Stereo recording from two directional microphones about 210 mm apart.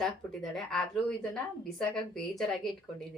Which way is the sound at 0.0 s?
Centre (ahead or behind).